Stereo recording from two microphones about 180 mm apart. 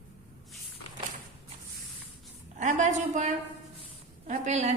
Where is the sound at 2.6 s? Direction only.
40° right (ahead or behind).